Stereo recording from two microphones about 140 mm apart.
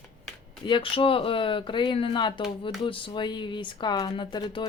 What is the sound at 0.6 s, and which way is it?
Speech, 35° left (ahead or behind).